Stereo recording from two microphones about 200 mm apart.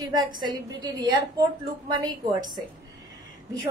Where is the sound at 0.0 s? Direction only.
20° right (ahead or behind).